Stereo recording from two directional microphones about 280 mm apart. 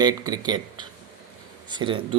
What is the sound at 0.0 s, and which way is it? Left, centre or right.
A man's voice, centre.